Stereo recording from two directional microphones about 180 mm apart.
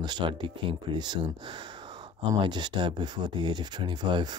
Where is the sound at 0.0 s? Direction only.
25° right (ahead or behind).